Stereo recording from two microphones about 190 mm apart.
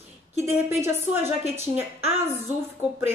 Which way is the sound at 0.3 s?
35° left (ahead or behind).